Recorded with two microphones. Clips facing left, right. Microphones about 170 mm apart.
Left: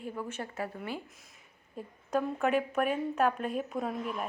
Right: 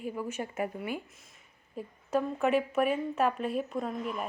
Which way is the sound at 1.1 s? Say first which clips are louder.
Left 1 dB; centre (ahead or behind).